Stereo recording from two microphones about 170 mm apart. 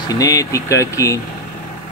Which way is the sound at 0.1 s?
20° left (ahead or behind).